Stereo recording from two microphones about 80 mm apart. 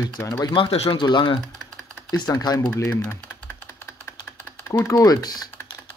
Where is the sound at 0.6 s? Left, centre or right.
Left.